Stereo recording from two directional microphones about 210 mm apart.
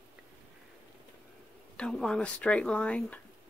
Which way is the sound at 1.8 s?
5° left (ahead or behind).